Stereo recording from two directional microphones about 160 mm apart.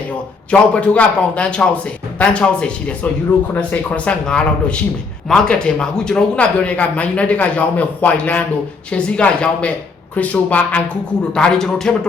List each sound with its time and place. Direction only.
0.1 s speech: 10° left (ahead or behind)